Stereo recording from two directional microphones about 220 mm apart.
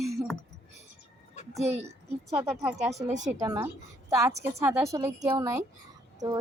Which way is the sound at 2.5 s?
10° right (ahead or behind).